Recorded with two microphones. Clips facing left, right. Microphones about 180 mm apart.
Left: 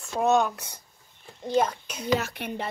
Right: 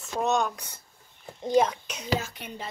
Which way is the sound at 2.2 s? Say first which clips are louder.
Left 6 dB; 65° left (ahead or behind).